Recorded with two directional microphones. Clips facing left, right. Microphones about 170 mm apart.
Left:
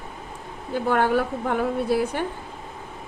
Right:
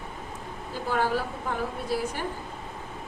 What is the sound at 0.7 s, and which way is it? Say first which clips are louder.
A woman's voice: left 6 dB; 60° left (ahead or behind).